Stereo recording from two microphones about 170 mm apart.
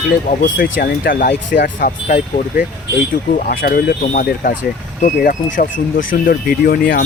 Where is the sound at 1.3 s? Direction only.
90° left.